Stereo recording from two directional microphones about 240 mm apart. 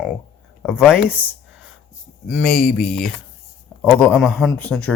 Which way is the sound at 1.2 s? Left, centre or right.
Centre.